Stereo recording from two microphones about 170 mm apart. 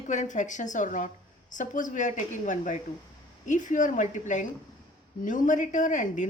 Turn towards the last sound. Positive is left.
turn(degrees=45)  # may be behind; listen again after turning